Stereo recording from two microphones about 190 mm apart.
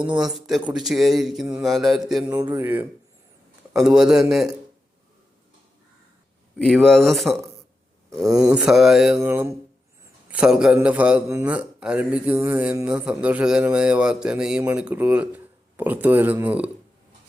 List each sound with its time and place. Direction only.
0.0 s speech: 5° right (ahead or behind)
6.8 s speech: centre (ahead or behind)
8.1 s a man's voice: 20° right (ahead or behind)
8.4 s a man's voice: 5° right (ahead or behind)